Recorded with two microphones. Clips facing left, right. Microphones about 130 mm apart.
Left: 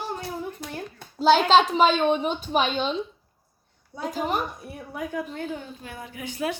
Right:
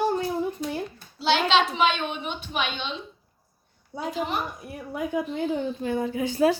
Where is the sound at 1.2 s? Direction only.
45° left (ahead or behind).